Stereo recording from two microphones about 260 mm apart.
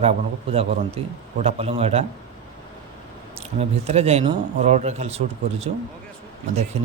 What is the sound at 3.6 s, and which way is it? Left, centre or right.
A man's voice, right.